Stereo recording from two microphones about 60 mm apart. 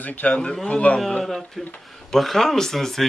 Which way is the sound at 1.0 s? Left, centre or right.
Centre.